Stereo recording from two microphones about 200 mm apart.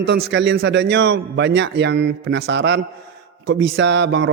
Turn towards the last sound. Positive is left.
turn(degrees=-65)  # may be behind; listen again after turning